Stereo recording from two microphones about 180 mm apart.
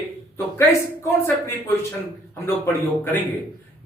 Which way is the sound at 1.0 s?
15° left (ahead or behind).